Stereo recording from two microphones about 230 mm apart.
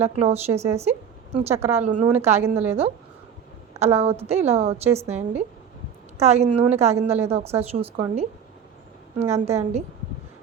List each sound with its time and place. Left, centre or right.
0.0 s a woman's voice: right
0.8 s a sound: right
1.5 s a woman's voice: centre
1.8 s a woman's voice: right
3.8 s a woman's voice: right
9.3 s a woman's voice: right